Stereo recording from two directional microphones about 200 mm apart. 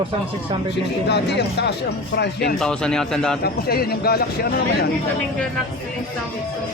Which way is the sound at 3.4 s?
50° left (ahead or behind).